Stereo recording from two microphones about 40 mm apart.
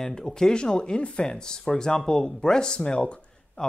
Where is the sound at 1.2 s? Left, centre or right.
Centre.